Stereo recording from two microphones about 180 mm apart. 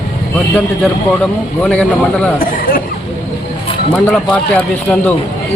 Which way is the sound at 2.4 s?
50° left (ahead or behind).